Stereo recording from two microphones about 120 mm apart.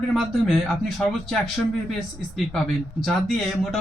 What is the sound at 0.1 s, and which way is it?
A man's voice, centre (ahead or behind).